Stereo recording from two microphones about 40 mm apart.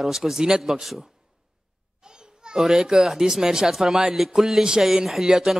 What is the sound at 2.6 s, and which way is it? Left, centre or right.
Speech, centre.